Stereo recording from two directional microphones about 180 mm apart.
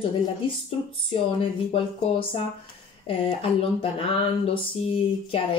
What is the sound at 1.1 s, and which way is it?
A woman's voice, 30° left (ahead or behind).